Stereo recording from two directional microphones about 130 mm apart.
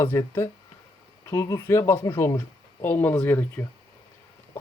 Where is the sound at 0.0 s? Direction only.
20° left (ahead or behind).